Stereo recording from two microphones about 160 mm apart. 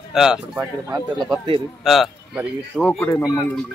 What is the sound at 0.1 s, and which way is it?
Speech, 5° right (ahead or behind).